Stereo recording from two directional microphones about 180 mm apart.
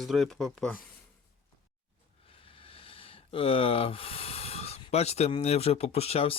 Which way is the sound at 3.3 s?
30° left (ahead or behind).